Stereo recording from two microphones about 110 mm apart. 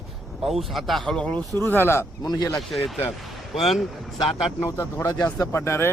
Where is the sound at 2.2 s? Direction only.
40° left (ahead or behind).